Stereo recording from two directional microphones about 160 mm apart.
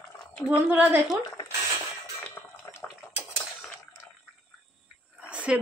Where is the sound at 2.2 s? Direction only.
15° left (ahead or behind).